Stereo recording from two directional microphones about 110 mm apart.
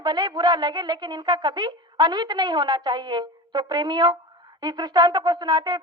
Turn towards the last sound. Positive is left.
turn(degrees=-40)  # may be behind; listen again after turning